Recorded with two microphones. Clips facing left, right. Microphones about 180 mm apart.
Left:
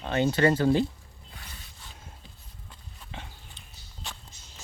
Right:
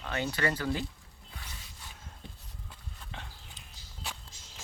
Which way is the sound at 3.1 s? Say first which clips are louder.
Left 3 dB; centre (ahead or behind).